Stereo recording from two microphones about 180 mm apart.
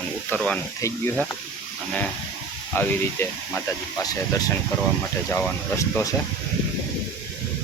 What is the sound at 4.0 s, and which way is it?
Speech, 20° left (ahead or behind).